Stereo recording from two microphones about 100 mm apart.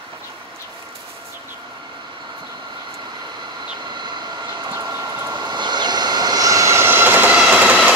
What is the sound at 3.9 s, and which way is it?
Vehicle, 45° right (ahead or behind).